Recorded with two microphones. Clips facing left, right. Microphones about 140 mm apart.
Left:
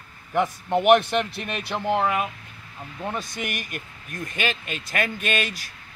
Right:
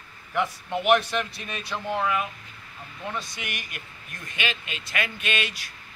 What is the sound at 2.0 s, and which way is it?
Speech, 45° left (ahead or behind).